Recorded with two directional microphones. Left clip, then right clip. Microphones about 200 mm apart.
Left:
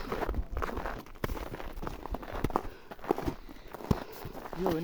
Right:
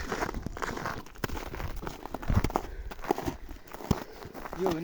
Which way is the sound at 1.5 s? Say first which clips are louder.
Right 2 dB; 60° right (ahead or behind).